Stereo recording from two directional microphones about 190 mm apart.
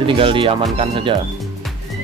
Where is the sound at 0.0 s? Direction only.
25° right (ahead or behind).